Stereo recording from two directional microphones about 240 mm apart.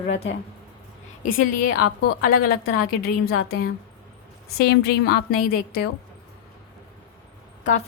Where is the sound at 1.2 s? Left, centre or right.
Left.